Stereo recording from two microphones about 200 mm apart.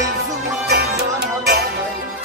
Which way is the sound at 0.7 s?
55° right (ahead or behind).